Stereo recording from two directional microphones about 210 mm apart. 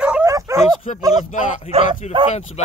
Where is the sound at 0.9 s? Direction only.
35° left (ahead or behind).